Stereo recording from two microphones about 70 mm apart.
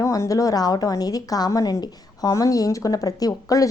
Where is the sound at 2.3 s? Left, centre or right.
Left.